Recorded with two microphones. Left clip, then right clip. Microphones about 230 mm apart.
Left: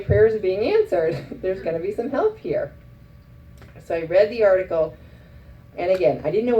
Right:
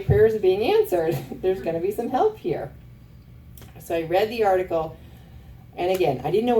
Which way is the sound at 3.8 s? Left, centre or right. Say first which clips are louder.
Left 4 dB; right.